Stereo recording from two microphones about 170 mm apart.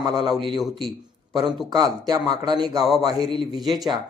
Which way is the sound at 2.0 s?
25° right (ahead or behind).